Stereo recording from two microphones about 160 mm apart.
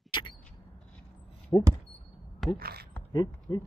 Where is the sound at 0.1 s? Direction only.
30° left (ahead or behind).